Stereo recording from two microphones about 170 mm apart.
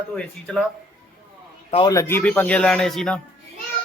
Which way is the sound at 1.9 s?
15° left (ahead or behind).